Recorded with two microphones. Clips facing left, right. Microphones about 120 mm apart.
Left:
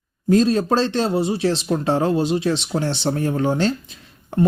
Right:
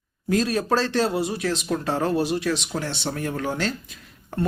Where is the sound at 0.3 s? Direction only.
25° left (ahead or behind).